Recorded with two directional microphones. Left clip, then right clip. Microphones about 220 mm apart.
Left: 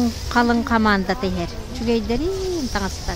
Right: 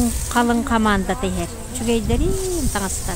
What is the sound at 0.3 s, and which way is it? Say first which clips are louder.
A woman's voice: left 1 dB; centre (ahead or behind).